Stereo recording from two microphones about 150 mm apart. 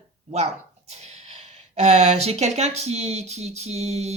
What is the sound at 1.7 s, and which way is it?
Speech, 45° right (ahead or behind).